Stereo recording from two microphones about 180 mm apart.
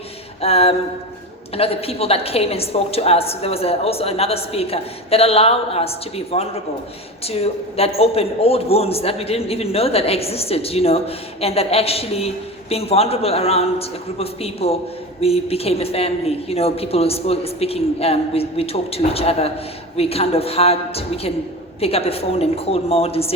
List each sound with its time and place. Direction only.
0.4 s a man's voice: 35° left (ahead or behind)